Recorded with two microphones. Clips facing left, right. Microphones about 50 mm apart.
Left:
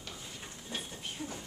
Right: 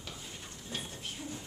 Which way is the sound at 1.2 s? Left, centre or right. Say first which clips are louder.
Left 2 dB; centre.